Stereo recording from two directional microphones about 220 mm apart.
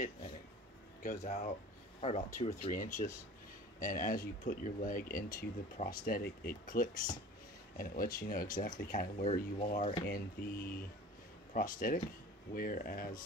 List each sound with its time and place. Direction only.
1.0 s speech: 35° left (ahead or behind)